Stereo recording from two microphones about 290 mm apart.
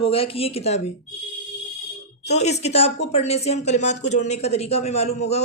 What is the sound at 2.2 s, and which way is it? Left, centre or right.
A woman's voice, left.